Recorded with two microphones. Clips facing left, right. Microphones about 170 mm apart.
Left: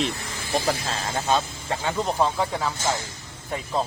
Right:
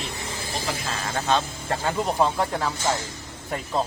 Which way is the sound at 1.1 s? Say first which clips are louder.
Even; 5° left (ahead or behind).